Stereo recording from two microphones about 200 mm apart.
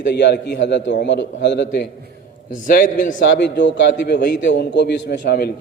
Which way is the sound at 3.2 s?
60° left (ahead or behind).